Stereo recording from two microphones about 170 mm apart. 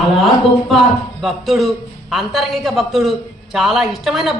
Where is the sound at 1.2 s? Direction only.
Centre (ahead or behind).